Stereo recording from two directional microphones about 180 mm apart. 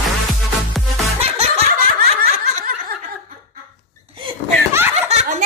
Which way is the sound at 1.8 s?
50° right (ahead or behind).